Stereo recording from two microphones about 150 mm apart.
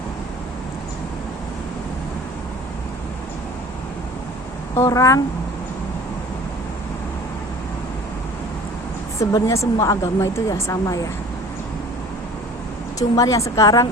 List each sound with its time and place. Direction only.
4.7 s a woman's voice: 20° left (ahead or behind)
9.3 s a woman's voice: 20° left (ahead or behind)
13.0 s a woman's voice: 25° left (ahead or behind)